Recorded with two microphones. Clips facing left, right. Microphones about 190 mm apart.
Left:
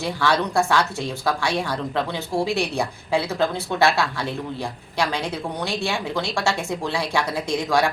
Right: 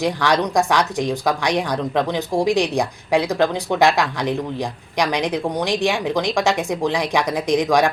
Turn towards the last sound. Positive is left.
turn(degrees=-15)  # may be behind; listen again after turning